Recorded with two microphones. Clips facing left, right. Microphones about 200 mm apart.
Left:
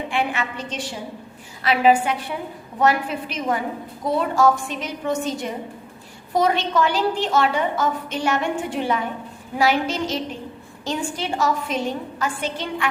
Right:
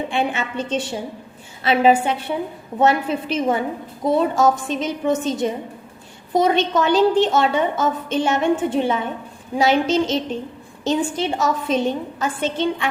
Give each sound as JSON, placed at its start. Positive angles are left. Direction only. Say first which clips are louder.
{"t": 0.1, "sound": "a woman's voice", "louder": "right 2 dB", "side_deg": -25}